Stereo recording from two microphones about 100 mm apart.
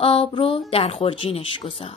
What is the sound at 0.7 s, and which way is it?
Speech, 75° left (ahead or behind).